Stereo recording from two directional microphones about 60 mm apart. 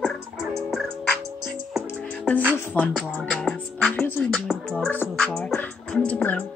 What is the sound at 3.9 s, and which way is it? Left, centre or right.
Speech, left.